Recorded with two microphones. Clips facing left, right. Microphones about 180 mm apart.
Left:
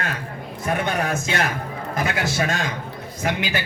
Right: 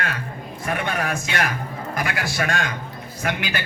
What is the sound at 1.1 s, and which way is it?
A man's voice, 25° left (ahead or behind).